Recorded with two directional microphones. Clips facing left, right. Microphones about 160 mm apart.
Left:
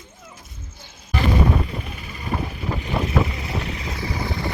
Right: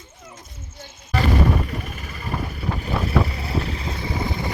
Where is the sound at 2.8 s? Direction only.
40° right (ahead or behind).